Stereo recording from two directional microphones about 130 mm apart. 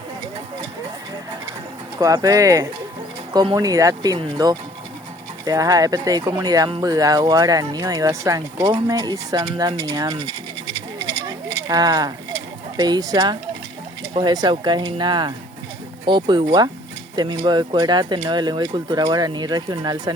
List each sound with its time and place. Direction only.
2.0 s speech: 25° right (ahead or behind)
11.7 s speech: 30° right (ahead or behind)